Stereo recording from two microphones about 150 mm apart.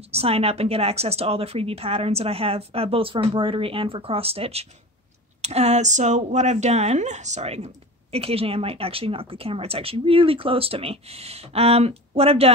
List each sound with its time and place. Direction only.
0.1 s speech: 40° right (ahead or behind)